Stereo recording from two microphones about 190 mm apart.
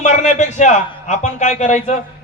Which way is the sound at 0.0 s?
40° left (ahead or behind).